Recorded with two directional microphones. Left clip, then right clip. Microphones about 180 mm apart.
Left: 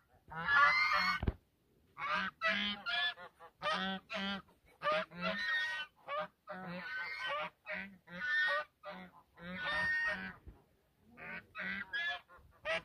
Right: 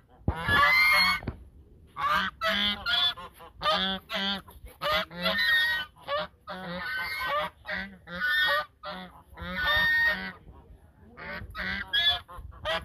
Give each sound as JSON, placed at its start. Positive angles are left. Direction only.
{"t": 0.3, "sound": "goose", "side_deg": -15}